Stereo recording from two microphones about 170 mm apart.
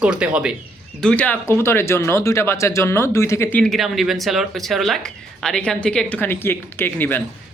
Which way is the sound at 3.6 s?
Centre (ahead or behind).